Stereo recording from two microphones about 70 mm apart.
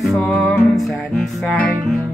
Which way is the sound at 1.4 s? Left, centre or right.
Left.